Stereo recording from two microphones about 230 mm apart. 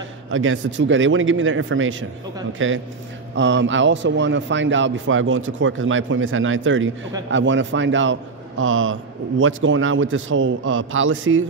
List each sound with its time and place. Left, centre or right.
0.3 s a man's voice: right